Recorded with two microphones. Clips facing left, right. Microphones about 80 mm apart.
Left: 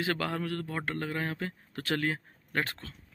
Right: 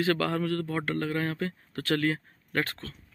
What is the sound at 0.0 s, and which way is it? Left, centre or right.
A man's voice, centre.